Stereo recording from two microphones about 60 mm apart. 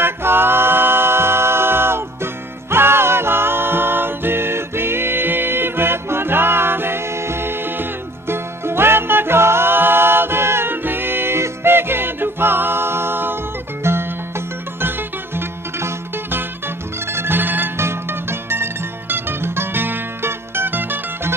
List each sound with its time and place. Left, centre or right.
0.0 s music: right